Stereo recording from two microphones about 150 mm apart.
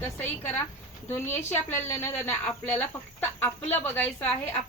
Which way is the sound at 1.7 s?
15° left (ahead or behind).